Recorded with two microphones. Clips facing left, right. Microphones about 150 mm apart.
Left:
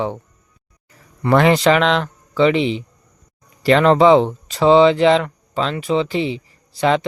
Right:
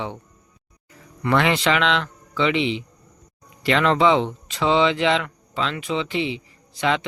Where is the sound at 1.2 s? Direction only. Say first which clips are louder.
Left 6 dB; 40° left (ahead or behind).